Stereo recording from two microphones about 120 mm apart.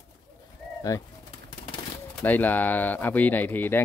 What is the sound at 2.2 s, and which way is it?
Speech, 15° left (ahead or behind).